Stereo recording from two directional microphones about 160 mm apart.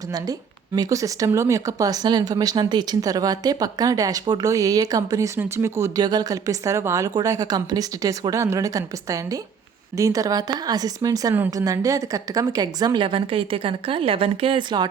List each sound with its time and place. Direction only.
0.8 s speech: 20° right (ahead or behind)